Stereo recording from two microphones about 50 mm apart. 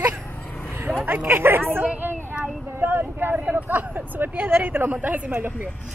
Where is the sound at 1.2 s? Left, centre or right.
Right.